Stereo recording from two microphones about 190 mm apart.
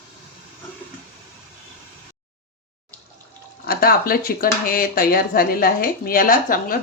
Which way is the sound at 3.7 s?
50° left (ahead or behind).